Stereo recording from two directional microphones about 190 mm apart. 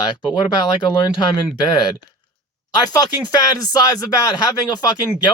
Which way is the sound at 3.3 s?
20° left (ahead or behind).